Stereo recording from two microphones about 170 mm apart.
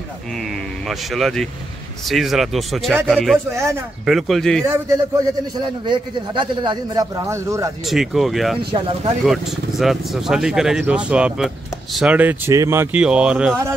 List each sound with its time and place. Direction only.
0.8 s speech: centre (ahead or behind)
3.5 s speech: 15° right (ahead or behind)
4.0 s speech: centre (ahead or behind)
4.7 s a man's voice: 20° right (ahead or behind)
7.8 s speech: centre (ahead or behind)